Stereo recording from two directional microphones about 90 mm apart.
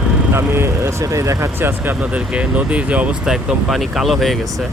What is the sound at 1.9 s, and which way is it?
Speech, 15° right (ahead or behind).